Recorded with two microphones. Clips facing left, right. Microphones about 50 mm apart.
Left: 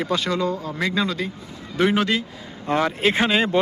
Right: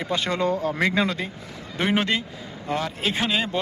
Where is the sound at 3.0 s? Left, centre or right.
Centre.